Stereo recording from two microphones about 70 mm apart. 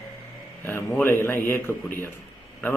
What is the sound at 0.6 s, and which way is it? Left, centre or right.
Speech, left.